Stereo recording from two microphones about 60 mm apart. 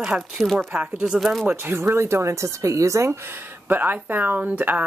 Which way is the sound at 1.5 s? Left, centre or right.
Right.